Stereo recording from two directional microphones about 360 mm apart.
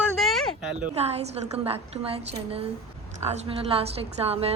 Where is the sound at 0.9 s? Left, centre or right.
Centre.